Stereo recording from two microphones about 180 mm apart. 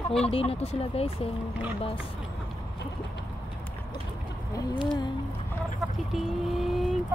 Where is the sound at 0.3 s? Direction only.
30° left (ahead or behind).